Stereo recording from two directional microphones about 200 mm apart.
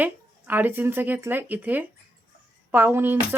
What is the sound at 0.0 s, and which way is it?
Speech, 10° right (ahead or behind).